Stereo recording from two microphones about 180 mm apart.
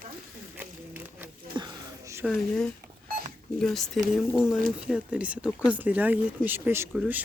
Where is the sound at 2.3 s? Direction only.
Centre (ahead or behind).